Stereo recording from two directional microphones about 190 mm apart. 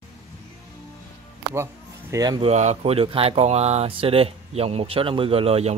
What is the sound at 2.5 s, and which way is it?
Speech, 35° right (ahead or behind).